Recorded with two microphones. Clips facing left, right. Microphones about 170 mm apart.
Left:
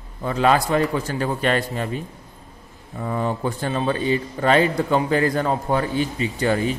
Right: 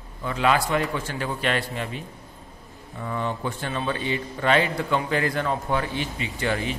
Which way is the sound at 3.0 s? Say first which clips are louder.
Left 4 dB; 40° left (ahead or behind).